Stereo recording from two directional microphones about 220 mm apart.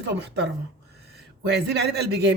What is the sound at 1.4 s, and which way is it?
Speech, 50° right (ahead or behind).